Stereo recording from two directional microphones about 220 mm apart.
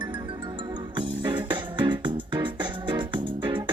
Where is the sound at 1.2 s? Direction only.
20° right (ahead or behind).